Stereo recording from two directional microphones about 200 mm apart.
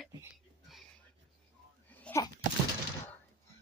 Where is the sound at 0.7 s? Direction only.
Centre (ahead or behind).